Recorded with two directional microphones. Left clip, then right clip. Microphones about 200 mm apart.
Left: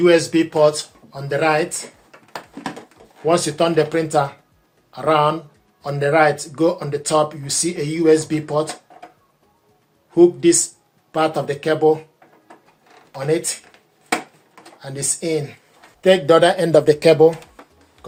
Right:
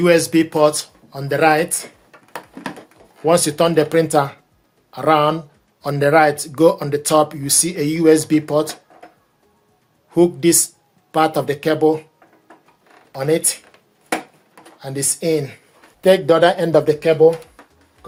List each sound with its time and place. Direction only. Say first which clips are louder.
0.0 s speech: even; 55° right (ahead or behind)
3.2 s speech: right 2 dB; 60° right (ahead or behind)
10.1 s speech: left 2 dB; 60° right (ahead or behind)
13.1 s speech: right 2 dB; 55° right (ahead or behind)
14.8 s speech: right 2 dB; 55° right (ahead or behind)
16.0 s speech: even; 25° right (ahead or behind); by 16.6 s 10° right (ahead or behind)
16.8 s speech: left 2 dB; 30° left (ahead or behind)